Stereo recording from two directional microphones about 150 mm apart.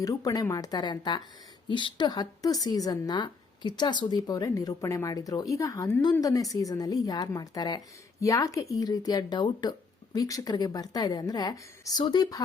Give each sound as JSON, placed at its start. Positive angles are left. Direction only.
{"t": 0.0, "sound": "a woman's voice", "side_deg": 25}